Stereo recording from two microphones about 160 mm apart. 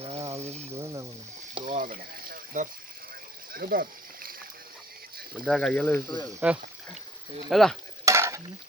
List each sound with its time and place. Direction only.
0.0 s a sound: 40° right (ahead or behind)
0.7 s snake: 15° right (ahead or behind)
1.6 s boiling: 55° right (ahead or behind)
3.5 s a sound: 65° right (ahead or behind)
5.5 s speech: 5° left (ahead or behind)
6.1 s speech: 25° left (ahead or behind)
6.4 s speech: 5° right (ahead or behind)
7.5 s stir: centre (ahead or behind)
8.0 s stir: 20° right (ahead or behind)